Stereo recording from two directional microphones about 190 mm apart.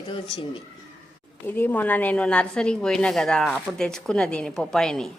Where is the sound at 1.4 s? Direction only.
10° left (ahead or behind).